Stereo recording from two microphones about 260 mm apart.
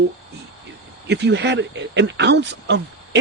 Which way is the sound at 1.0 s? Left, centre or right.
Right.